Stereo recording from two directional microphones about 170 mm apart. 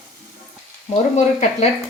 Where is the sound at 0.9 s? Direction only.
40° left (ahead or behind).